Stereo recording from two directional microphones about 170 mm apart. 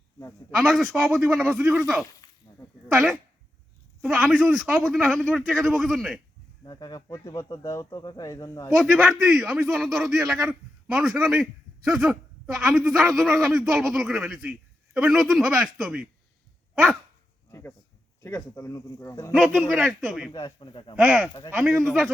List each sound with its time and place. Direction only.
0.5 s speech: centre (ahead or behind)
2.2 s a sound: 25° left (ahead or behind)
2.9 s speech: centre (ahead or behind)
6.7 s speech: 25° left (ahead or behind)
8.7 s speech: centre (ahead or behind)
17.5 s a sound: 15° left (ahead or behind)
18.2 s speech: 15° left (ahead or behind)
19.3 s speech: centre (ahead or behind)
20.3 s speech: 25° left (ahead or behind)
20.9 s speech: 5° right (ahead or behind)